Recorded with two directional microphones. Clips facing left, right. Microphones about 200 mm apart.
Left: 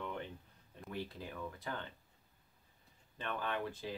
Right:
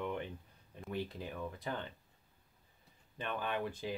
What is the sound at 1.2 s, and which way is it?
Speech, 15° right (ahead or behind).